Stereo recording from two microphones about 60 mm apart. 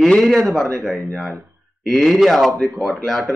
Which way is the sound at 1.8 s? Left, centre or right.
Centre.